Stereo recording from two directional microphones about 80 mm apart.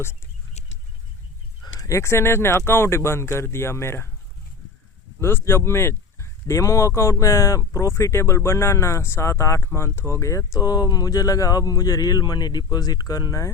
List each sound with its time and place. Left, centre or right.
1.9 s speech: left
5.2 s speech: left